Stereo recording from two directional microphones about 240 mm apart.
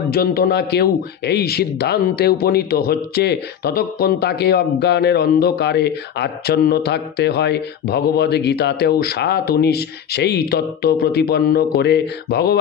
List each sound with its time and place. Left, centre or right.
0.1 s a man's voice: left